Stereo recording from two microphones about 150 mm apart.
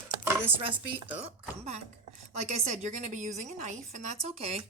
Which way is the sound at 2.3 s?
45° right (ahead or behind).